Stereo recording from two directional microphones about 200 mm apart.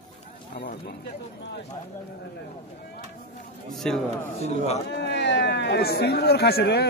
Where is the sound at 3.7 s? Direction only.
Centre (ahead or behind).